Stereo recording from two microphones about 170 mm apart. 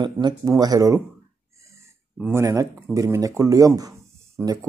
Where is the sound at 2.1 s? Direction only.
10° right (ahead or behind).